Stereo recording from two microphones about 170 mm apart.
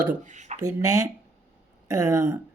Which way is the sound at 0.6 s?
15° right (ahead or behind).